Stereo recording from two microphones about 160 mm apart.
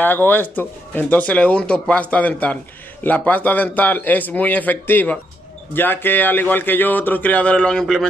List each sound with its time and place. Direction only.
0.0 s speech: 10° left (ahead or behind)